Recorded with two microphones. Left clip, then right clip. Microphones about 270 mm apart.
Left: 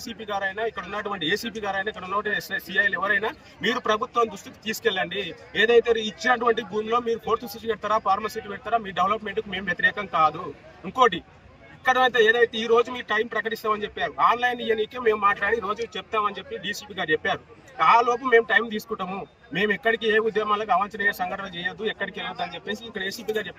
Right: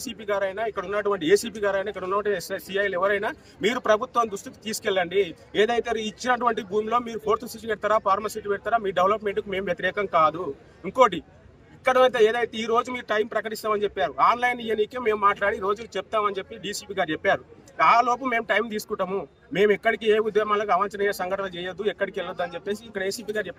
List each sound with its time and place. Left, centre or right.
0.0 s speech: centre
11.9 s speech: centre